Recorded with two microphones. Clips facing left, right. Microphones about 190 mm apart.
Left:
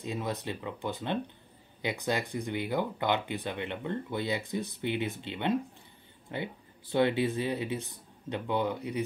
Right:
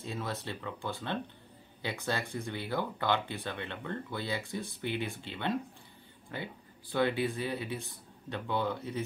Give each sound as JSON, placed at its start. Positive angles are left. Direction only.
{"t": 0.0, "sound": "speech", "side_deg": 15}